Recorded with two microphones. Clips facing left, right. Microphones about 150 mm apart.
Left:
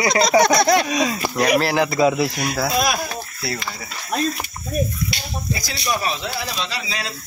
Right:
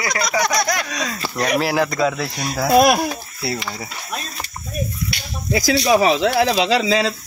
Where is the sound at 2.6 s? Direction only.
55° right (ahead or behind).